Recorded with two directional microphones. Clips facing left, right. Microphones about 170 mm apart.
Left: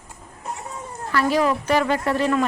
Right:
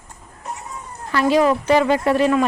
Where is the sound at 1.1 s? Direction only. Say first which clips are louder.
Right 4 dB; 20° right (ahead or behind).